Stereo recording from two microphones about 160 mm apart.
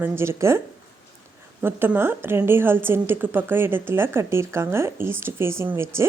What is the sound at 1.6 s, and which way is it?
Speech, 15° right (ahead or behind).